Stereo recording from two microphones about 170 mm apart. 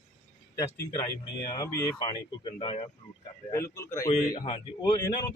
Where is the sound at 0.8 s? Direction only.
20° left (ahead or behind).